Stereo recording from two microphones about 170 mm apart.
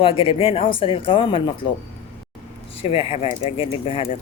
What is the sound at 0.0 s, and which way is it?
Speech, 30° left (ahead or behind).